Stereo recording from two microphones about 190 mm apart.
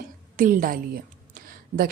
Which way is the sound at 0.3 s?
45° right (ahead or behind).